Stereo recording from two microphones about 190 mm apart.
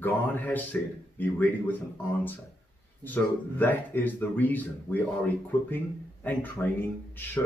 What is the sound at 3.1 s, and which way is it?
Speech, 10° left (ahead or behind).